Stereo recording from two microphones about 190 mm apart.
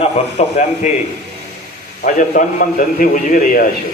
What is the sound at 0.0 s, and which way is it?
Speech, 35° left (ahead or behind).